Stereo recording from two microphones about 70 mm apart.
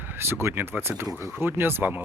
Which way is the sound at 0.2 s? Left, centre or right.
Right.